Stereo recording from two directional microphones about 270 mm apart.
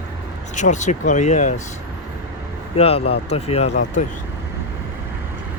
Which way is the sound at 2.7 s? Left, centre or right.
Left.